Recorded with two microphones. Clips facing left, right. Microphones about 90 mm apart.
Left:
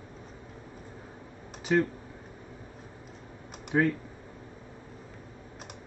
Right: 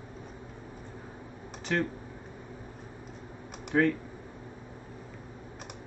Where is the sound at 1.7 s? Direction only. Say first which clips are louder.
Left 5 dB; 10° left (ahead or behind).